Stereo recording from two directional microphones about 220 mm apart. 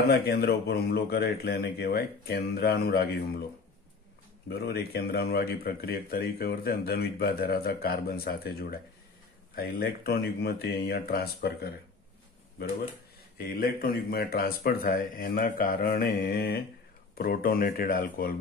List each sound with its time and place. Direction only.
0.1 s speech: 45° left (ahead or behind)
4.5 s speech: 45° left (ahead or behind)
13.4 s speech: 40° left (ahead or behind)